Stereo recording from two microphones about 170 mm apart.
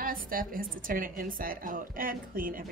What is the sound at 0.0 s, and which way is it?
Speech, 55° right (ahead or behind).